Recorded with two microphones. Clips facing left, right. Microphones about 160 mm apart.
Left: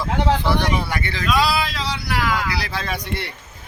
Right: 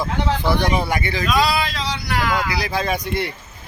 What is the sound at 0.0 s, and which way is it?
Speech, 15° right (ahead or behind).